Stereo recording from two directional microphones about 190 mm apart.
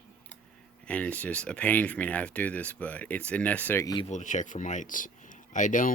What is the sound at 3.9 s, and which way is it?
Speech, 35° left (ahead or behind).